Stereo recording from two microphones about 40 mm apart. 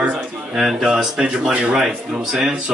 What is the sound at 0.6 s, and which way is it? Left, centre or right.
Speech, centre.